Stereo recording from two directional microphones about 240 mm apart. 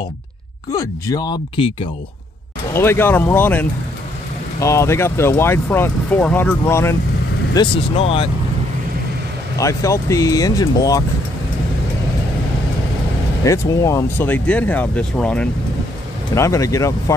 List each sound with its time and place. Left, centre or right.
0.7 s speech: centre
7.5 s speech: left
9.6 s speech: centre
13.4 s speech: centre